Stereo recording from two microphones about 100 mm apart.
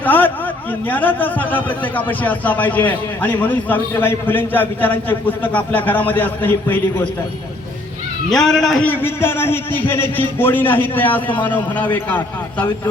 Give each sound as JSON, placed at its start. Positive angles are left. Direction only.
{"t": 0.0, "sound": "a sound", "side_deg": 20}
{"t": 0.9, "sound": "a man's voice", "side_deg": 20}
{"t": 8.3, "sound": "a man's voice", "side_deg": 5}
{"t": 8.9, "sound": "a man's voice", "side_deg": 20}